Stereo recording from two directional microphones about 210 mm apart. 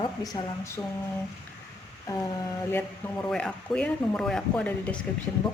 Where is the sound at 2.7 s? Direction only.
10° left (ahead or behind).